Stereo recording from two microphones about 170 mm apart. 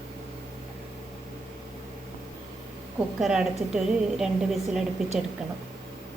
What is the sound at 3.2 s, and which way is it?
A woman's voice, 5° right (ahead or behind).